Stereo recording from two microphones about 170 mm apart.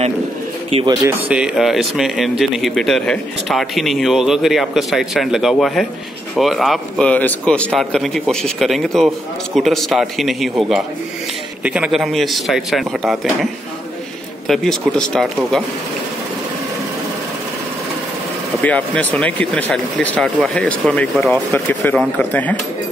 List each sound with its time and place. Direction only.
0.7 s speech: 35° right (ahead or behind)
1.0 s speech: 10° right (ahead or behind)
14.5 s speech: centre (ahead or behind)
18.6 s speech: 10° left (ahead or behind)